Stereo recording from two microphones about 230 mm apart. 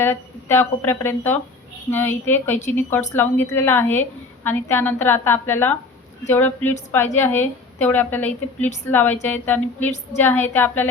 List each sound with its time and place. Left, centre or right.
0.0 s a woman's voice: centre